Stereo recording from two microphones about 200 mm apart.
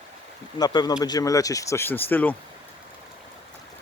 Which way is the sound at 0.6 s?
20° left (ahead or behind).